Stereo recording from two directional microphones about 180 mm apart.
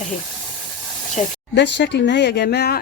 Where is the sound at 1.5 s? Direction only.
70° left (ahead or behind).